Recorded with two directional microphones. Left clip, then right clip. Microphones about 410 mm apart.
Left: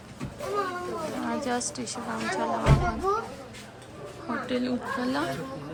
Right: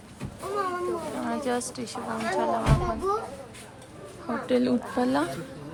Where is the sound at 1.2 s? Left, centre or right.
Centre.